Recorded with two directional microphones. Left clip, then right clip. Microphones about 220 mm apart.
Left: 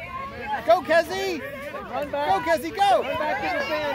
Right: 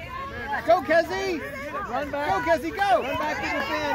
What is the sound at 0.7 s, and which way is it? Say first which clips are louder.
Speech: left 1 dB; 50° left (ahead or behind).